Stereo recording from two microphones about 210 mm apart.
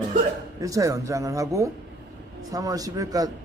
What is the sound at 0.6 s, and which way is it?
A man's voice, 15° right (ahead or behind).